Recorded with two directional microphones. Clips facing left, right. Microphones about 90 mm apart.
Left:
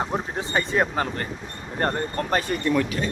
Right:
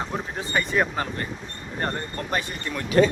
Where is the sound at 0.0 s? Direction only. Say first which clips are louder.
Left 3 dB; 25° left (ahead or behind).